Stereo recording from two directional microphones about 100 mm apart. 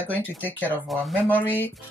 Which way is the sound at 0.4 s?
15° left (ahead or behind).